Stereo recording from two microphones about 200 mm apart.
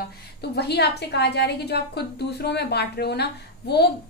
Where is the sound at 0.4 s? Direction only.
55° left (ahead or behind).